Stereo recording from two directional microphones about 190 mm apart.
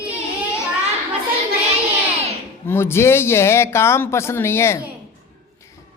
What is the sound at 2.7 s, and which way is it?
Speech, 10° left (ahead or behind).